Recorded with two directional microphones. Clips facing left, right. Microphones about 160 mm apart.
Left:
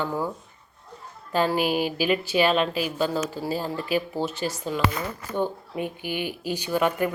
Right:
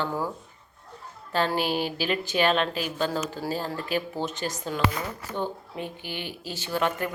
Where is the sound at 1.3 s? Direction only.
5° left (ahead or behind).